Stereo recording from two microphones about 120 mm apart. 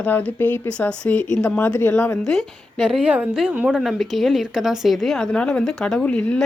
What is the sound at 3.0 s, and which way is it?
A woman's voice, 15° right (ahead or behind).